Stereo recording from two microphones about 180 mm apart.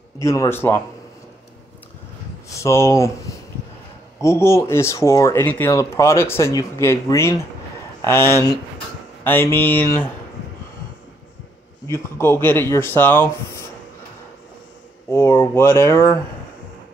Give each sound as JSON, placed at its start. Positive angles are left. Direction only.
{"t": 0.2, "sound": "speech", "side_deg": 15}
{"t": 2.6, "sound": "speech", "side_deg": 15}
{"t": 4.2, "sound": "speech", "side_deg": 15}
{"t": 11.9, "sound": "speech", "side_deg": 15}
{"t": 15.0, "sound": "speech", "side_deg": 15}